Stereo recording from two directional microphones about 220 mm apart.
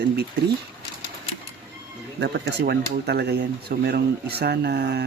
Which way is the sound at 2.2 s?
50° right (ahead or behind).